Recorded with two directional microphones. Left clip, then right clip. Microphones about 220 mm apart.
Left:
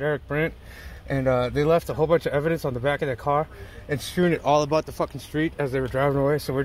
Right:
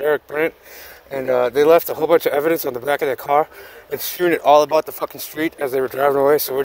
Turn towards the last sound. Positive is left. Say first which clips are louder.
# right 8 dB
turn(degrees=-40)  # may be behind; listen again after turning